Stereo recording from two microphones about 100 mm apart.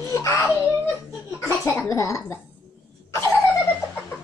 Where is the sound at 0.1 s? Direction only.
30° left (ahead or behind).